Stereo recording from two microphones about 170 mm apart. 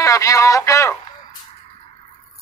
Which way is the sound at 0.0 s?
20° left (ahead or behind).